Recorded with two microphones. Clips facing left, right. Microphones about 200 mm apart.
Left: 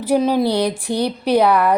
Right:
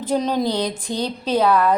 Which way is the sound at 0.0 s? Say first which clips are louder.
Left 4 dB; 10° left (ahead or behind).